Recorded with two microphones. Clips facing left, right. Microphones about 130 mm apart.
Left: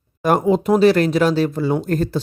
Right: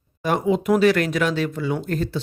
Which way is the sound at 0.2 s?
45° left (ahead or behind).